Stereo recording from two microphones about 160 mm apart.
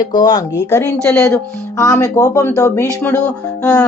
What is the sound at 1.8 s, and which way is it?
Speech, 20° left (ahead or behind).